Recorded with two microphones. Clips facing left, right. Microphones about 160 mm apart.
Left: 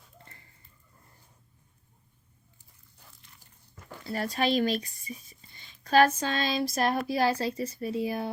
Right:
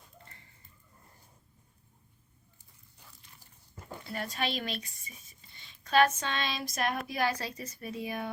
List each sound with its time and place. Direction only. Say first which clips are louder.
4.0 s speech: left 6 dB; 35° left (ahead or behind)